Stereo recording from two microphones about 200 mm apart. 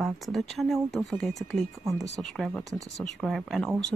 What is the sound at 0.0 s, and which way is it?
Speech, centre (ahead or behind).